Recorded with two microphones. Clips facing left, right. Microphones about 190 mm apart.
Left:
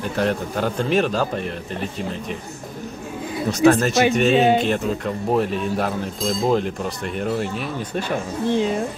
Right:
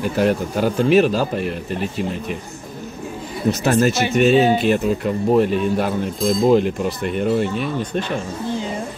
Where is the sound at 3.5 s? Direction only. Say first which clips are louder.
Left 1 dB; 5° right (ahead or behind).